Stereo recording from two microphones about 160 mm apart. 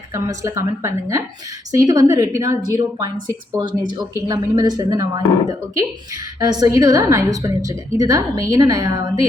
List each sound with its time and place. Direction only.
0.1 s a woman's voice: 20° right (ahead or behind)